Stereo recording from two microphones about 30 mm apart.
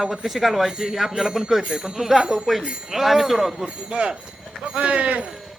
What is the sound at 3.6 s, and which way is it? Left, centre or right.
Speech, right.